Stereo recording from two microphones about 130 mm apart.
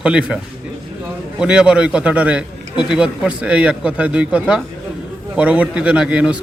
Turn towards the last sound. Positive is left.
turn(degrees=-10)  # may be behind; listen again after turning